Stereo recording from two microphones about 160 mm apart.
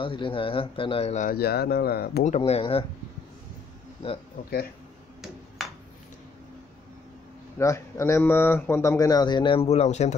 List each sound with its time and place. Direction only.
0.0 s speech: 30° left (ahead or behind)
1.3 s speech: 75° left (ahead or behind)
2.2 s speech: 45° left (ahead or behind)
7.5 s speech: 20° left (ahead or behind); by 10.1 s 45° left (ahead or behind)